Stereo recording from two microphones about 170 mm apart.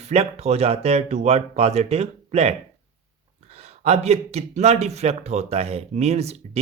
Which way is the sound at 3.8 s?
40° right (ahead or behind).